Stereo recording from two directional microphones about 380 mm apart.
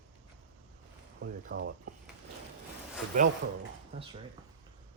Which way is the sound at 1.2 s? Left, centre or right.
Right.